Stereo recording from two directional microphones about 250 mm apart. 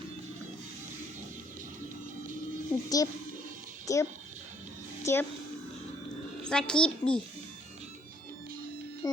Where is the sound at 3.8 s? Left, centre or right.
Centre.